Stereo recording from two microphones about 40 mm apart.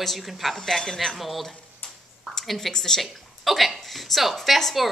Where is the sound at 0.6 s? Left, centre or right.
Centre.